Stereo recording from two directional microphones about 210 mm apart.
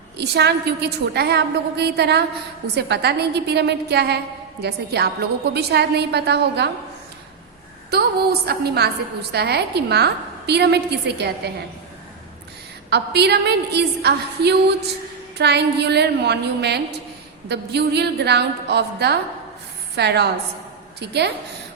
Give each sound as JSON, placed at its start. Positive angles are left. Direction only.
{"t": 0.2, "sound": "a woman's voice", "side_deg": -50}
{"t": 7.9, "sound": "a woman's voice", "side_deg": -50}
{"t": 12.9, "sound": "a woman's voice", "side_deg": -50}